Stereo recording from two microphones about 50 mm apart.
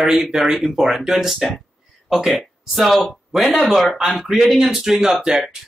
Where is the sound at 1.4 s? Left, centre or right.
Centre.